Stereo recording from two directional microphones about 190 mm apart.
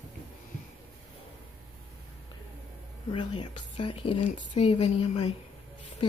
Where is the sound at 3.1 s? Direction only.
25° left (ahead or behind).